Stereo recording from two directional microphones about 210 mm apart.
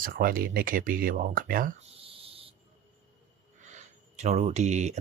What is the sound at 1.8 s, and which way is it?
Cricket, 25° right (ahead or behind).